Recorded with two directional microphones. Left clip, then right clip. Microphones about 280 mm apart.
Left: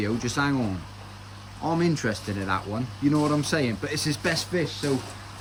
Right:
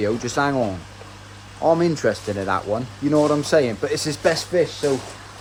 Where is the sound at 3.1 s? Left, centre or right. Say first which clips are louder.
Right 7 dB; right.